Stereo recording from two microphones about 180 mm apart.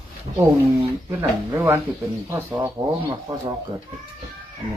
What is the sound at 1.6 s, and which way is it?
Speech, 15° right (ahead or behind).